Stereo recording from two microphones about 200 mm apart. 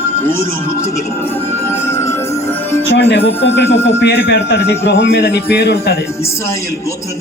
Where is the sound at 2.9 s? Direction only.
60° left (ahead or behind).